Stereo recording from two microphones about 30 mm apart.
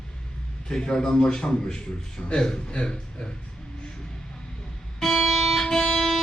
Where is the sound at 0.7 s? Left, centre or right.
Left.